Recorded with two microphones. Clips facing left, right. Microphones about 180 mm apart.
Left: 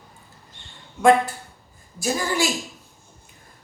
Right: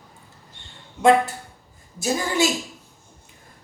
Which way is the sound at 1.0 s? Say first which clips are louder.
Even; 25° right (ahead or behind).